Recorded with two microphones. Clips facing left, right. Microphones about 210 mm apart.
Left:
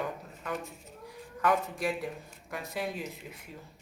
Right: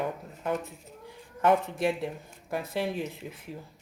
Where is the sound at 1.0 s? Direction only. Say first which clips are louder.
Right 4 dB; 25° right (ahead or behind).